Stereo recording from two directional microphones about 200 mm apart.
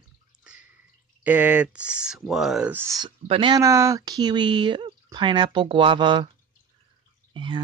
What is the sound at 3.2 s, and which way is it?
Speech, 25° right (ahead or behind).